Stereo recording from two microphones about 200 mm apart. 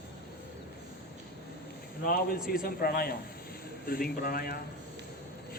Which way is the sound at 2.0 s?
45° left (ahead or behind).